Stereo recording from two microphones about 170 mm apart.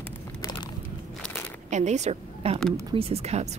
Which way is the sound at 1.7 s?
45° right (ahead or behind).